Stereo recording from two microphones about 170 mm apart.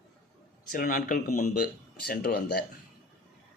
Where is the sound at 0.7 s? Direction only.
55° left (ahead or behind).